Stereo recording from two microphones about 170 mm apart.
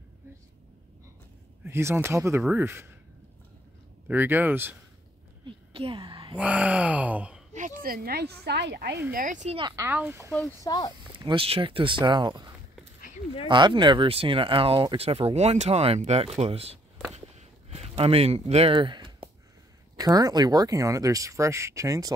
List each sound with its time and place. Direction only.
1.6 s speech: 15° right (ahead or behind)
4.1 s speech: 10° right (ahead or behind)
5.5 s a sound: 30° right (ahead or behind)
6.3 s speech: 10° right (ahead or behind)
7.8 s a woman's voice: 60° right (ahead or behind); by 9.0 s 75° right (ahead or behind)
9.1 s speech: 50° right (ahead or behind)
9.6 s speech: 25° right (ahead or behind)
9.8 s speech: 10° right (ahead or behind)
10.6 s speech: 25° left (ahead or behind)
11.0 s speech: 25° right (ahead or behind)
17.1 s a sound: 40° right (ahead or behind)
20.0 s speech: 20° right (ahead or behind)